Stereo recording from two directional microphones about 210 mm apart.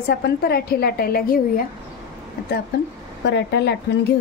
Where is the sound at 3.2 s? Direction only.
55° left (ahead or behind).